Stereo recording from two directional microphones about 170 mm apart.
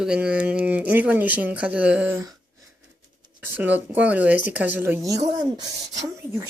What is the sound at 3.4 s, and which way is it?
Speech, 10° right (ahead or behind).